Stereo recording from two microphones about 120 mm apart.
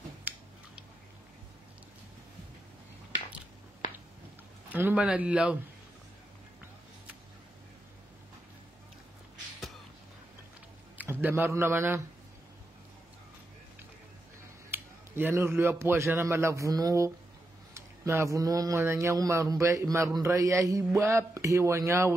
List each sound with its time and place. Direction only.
4.7 s speech: 15° right (ahead or behind)
11.0 s a man's voice: 15° right (ahead or behind)
14.7 s speech: 15° right (ahead or behind)